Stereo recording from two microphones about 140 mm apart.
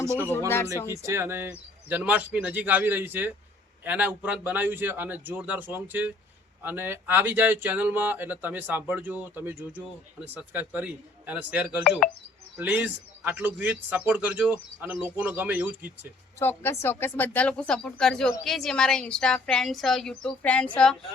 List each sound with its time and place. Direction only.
0.0 s speech: 20° right (ahead or behind)
0.3 s speech: 15° left (ahead or behind)
0.9 s speech: 20° right (ahead or behind)
16.4 s speech: 15° left (ahead or behind)